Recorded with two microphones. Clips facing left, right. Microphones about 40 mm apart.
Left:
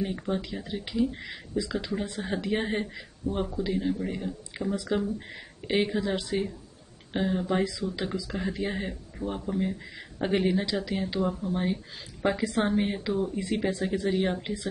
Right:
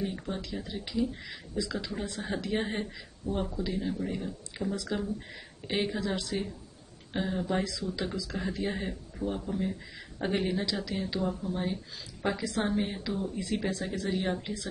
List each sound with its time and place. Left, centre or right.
0.0 s speech: left
7.1 s speech: centre
7.6 s a woman's voice: left